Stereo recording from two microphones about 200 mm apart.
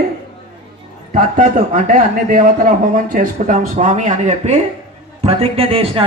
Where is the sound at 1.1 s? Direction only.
40° right (ahead or behind).